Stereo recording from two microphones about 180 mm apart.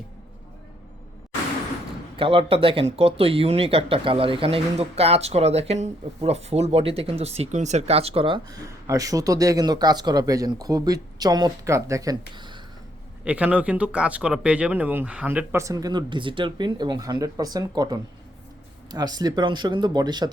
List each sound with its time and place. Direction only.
2.1 s speech: 30° right (ahead or behind)
13.2 s speech: 5° right (ahead or behind); by 20.3 s 25° right (ahead or behind)